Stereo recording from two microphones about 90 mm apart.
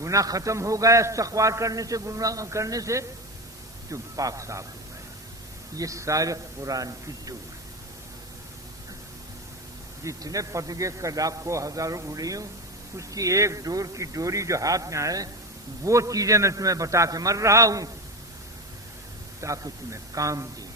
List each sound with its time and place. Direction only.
0.0 s a man's voice: 40° right (ahead or behind)
5.7 s a man's voice: 35° right (ahead or behind)
10.0 s a man's voice: 35° right (ahead or behind)
19.4 s a man's voice: 35° right (ahead or behind)